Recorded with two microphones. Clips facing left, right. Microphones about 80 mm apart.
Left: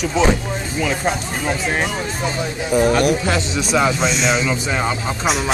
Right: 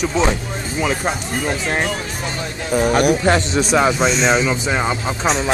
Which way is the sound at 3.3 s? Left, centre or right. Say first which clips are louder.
Right 4 dB; right.